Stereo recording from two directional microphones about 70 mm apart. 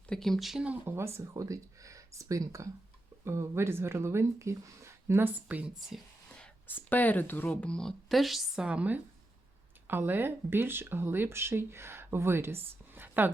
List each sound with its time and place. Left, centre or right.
0.1 s speech: centre
0.9 s speech: right
1.3 s speech: right
3.2 s speech: right
5.5 s speech: right
6.2 s whispering: centre
6.7 s speech: left; by 8.6 s centre
8.6 s speech: centre
9.8 s speech: right